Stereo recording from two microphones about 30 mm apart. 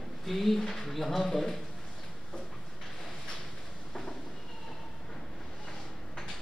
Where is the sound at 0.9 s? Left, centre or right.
Centre.